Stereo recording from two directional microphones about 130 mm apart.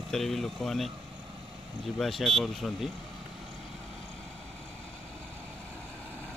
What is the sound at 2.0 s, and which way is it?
Speech, centre (ahead or behind).